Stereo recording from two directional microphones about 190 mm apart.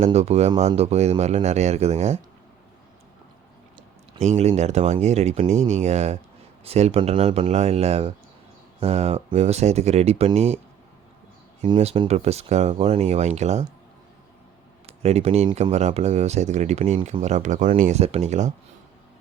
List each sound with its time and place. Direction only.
0.0 s speech: 35° right (ahead or behind)
4.2 s speech: 35° right (ahead or behind)
11.6 s speech: 30° right (ahead or behind)
15.0 s speech: 35° right (ahead or behind)